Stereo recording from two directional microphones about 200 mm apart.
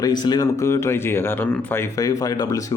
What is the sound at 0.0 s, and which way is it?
Speech, 20° left (ahead or behind).